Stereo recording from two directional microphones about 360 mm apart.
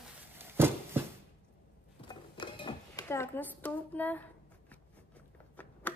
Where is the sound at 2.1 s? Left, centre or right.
Centre.